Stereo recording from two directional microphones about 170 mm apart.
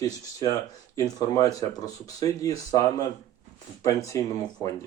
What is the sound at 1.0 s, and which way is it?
Speech, 20° left (ahead or behind).